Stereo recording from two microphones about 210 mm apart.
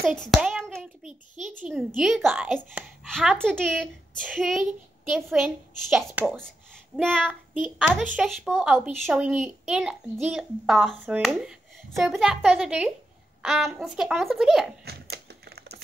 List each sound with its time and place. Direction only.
0.0 s clapping: centre (ahead or behind)
1.4 s a child's voice: 5° right (ahead or behind)
14.9 s typewriter: 50° right (ahead or behind)